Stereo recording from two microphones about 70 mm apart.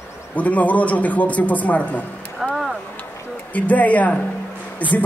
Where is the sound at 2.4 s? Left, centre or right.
Centre.